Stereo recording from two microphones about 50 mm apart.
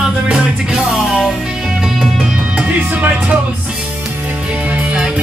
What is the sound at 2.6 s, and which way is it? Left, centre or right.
Speech, right.